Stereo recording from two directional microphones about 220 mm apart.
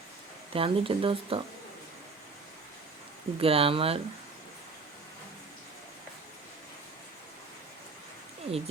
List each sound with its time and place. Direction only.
0.5 s speech: 25° right (ahead or behind)
3.3 s speech: 25° right (ahead or behind)
8.4 s speech: 25° right (ahead or behind)